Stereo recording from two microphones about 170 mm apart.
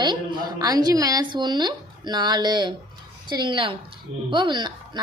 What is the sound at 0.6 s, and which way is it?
A woman's voice, 20° right (ahead or behind).